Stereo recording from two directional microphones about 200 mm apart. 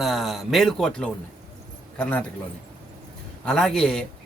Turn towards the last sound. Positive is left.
turn(degrees=5)  # may be behind; listen again after turning